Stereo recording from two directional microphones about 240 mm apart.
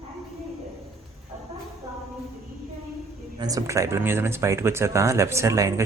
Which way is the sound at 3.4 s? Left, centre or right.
Centre.